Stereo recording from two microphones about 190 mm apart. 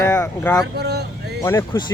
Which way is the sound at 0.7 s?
60° right (ahead or behind).